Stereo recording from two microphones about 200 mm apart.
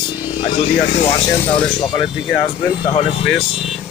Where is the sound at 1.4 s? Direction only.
25° left (ahead or behind).